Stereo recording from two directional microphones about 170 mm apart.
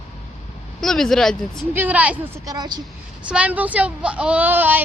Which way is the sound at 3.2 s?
10° right (ahead or behind).